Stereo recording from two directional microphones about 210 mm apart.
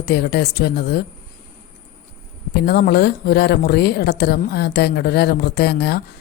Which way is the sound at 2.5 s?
50° left (ahead or behind).